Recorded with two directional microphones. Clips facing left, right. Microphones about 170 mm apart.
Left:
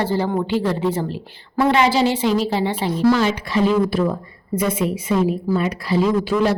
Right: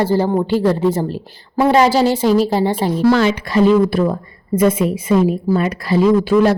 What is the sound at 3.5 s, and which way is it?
A woman's voice, 45° right (ahead or behind).